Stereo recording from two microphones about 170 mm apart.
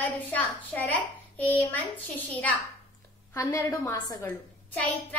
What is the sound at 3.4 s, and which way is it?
Speech, 20° left (ahead or behind).